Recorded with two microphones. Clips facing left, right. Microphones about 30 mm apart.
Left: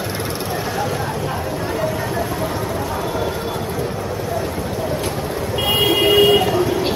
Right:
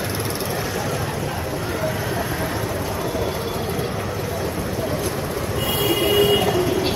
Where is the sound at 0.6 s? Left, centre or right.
Centre.